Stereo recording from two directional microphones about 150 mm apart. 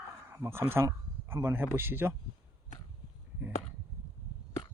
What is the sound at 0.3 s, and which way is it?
Speech, 20° right (ahead or behind).